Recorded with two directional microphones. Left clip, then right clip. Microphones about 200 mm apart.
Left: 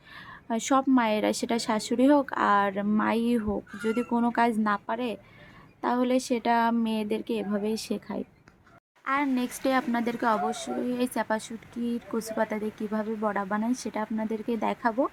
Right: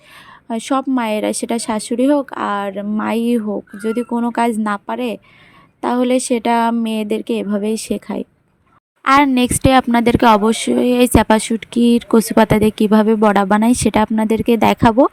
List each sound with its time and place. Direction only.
0.4 s speech: 25° right (ahead or behind)
9.0 s speech: 50° right (ahead or behind)